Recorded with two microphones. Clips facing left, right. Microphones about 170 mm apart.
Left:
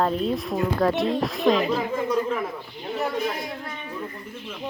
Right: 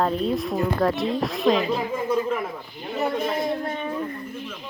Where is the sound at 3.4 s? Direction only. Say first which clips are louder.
Right 8 dB; 50° right (ahead or behind).